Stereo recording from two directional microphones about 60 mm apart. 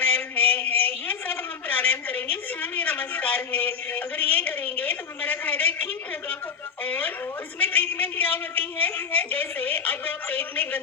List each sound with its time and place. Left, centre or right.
0.2 s a woman's voice: left